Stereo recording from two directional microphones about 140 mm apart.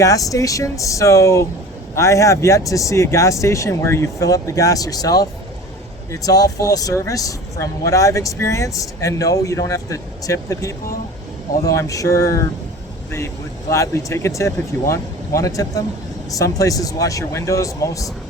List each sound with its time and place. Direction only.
0.0 s speech: 25° left (ahead or behind)